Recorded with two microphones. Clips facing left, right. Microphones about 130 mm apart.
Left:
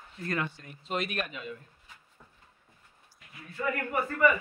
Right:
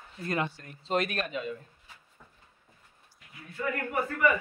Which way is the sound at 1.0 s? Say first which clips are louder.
Right 3 dB; 45° right (ahead or behind).